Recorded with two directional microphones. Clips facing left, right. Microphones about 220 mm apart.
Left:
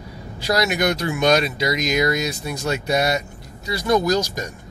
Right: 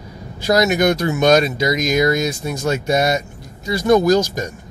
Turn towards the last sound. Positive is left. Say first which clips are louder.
# right 5 dB
turn(degrees=-50)  # may be behind; listen again after turning